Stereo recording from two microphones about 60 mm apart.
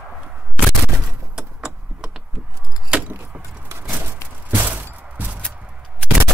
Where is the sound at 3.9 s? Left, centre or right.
Right.